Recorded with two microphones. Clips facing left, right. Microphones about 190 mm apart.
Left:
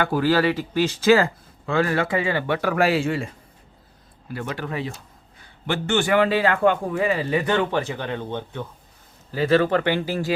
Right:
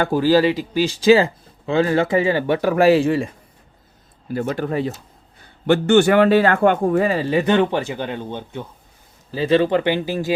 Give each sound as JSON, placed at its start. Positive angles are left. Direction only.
{"t": 0.3, "sound": "speech", "side_deg": -20}
{"t": 4.4, "sound": "a man's voice", "side_deg": -40}